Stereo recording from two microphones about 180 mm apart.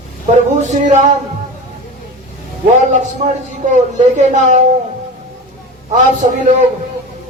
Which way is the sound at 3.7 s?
40° right (ahead or behind).